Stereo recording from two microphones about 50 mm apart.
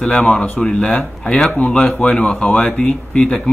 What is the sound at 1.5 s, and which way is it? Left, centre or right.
Speech, left.